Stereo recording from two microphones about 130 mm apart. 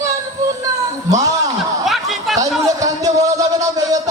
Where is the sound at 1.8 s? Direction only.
Centre (ahead or behind).